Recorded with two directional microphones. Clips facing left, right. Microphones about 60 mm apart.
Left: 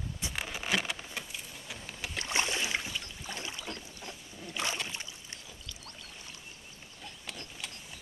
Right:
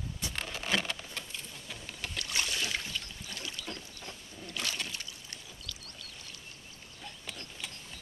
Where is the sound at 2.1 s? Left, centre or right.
Left.